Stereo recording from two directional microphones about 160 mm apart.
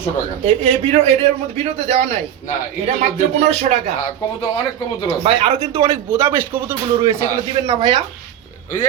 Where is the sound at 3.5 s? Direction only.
45° right (ahead or behind).